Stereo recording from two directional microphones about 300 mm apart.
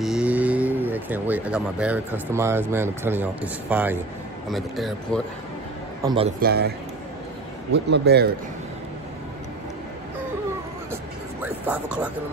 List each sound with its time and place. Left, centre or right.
0.0 s cattle: centre
4.5 s speech: centre
6.0 s a man's voice: centre
6.4 s speech: right
7.7 s speech: right
11.4 s speech: centre